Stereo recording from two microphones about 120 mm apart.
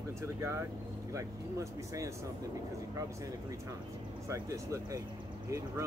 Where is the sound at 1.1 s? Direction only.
25° right (ahead or behind).